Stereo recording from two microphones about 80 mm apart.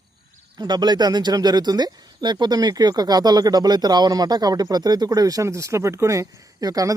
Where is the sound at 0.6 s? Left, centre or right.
Right.